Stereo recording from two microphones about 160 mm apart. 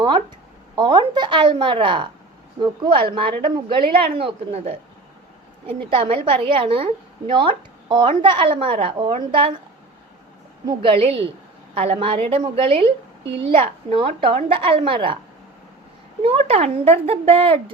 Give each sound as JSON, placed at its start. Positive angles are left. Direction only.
{"t": 0.8, "sound": "a woman's voice", "side_deg": -30}
{"t": 10.7, "sound": "a woman's voice", "side_deg": -35}
{"t": 16.2, "sound": "a woman's voice", "side_deg": -40}